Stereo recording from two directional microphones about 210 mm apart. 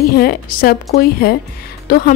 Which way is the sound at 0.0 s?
45° left (ahead or behind).